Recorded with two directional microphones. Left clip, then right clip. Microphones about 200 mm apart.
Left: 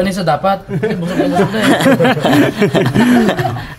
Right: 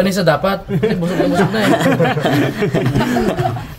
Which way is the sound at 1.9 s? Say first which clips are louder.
Left 4 dB; 50° left (ahead or behind).